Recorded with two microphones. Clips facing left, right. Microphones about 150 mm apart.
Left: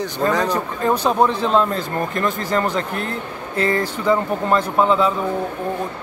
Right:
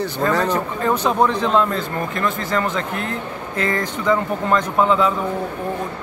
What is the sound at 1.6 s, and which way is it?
Speech, 40° left (ahead or behind).